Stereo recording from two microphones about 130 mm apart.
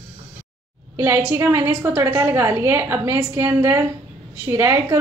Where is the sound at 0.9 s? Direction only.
15° right (ahead or behind).